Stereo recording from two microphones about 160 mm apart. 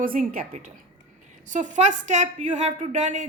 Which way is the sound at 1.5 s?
50° right (ahead or behind).